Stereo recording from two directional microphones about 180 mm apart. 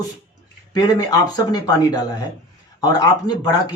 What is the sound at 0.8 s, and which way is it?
Speech, 20° left (ahead or behind).